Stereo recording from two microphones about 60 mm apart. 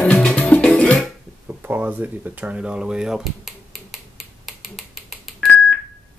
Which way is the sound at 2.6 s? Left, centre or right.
Centre.